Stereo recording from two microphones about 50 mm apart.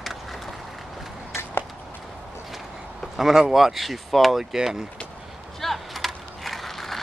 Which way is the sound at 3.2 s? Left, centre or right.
Centre.